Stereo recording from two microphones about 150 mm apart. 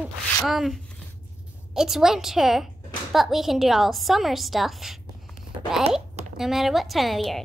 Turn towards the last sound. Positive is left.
turn(degrees=0)  # may be behind; listen again after turning